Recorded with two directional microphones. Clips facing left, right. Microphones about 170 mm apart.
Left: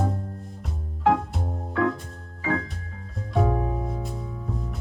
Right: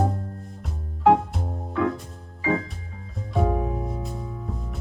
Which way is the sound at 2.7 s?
Centre (ahead or behind).